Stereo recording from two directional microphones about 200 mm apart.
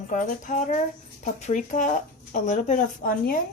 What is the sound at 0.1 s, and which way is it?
A woman's voice, 40° left (ahead or behind).